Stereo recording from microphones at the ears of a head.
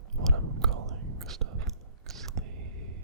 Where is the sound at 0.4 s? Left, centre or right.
Right.